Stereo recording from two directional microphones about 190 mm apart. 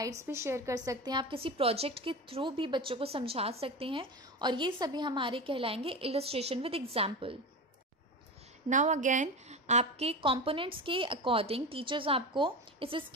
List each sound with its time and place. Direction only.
0.0 s a woman's voice: 15° right (ahead or behind)
8.6 s a woman's voice: 40° right (ahead or behind)